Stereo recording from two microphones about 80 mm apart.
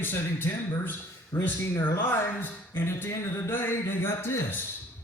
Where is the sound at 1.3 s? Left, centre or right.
Left.